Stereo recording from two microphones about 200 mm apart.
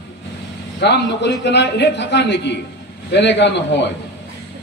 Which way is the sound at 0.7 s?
60° left (ahead or behind).